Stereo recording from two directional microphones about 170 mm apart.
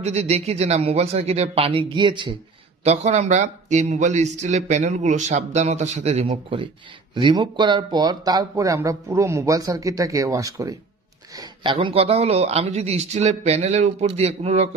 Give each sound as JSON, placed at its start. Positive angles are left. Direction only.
{"t": 0.0, "sound": "a man's voice", "side_deg": -40}
{"t": 2.8, "sound": "a man's voice", "side_deg": -40}